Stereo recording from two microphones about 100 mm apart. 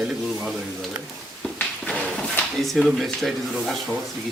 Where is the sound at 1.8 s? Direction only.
5° left (ahead or behind).